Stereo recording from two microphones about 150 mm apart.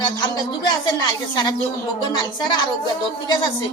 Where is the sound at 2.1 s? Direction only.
30° left (ahead or behind).